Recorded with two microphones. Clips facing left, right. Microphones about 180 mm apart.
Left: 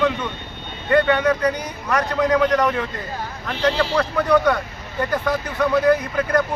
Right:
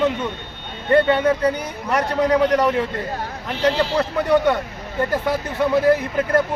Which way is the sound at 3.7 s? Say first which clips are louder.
Even; 20° right (ahead or behind).